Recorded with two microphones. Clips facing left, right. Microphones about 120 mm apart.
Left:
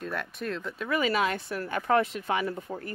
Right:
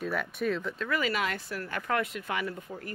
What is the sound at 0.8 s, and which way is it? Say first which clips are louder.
Speech: left 7 dB; 20° left (ahead or behind).